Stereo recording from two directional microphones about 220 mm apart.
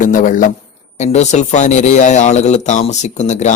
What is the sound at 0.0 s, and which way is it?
Speech, 35° left (ahead or behind).